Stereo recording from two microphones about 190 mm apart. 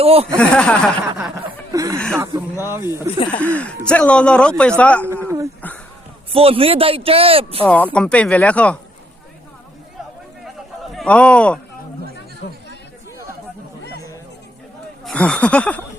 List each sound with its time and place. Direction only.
0.0 s speech: 30° right (ahead or behind)
0.3 s speech: 5° left (ahead or behind)
1.0 s chuckle: 15° right (ahead or behind)
1.7 s snicker: 20° right (ahead or behind)
2.1 s speech: 15° right (ahead or behind)
3.2 s speech: 5° left (ahead or behind)
5.6 s a sound: 10° left (ahead or behind)
6.3 s speech: 30° right (ahead or behind)
7.6 s speech: 10° left (ahead or behind)
10.9 s speech: 5° left (ahead or behind)
12.4 s speech: 60° left (ahead or behind)
15.0 s speech: 5° left (ahead or behind)